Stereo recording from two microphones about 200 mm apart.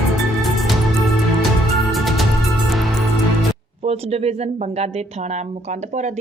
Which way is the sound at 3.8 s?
30° right (ahead or behind).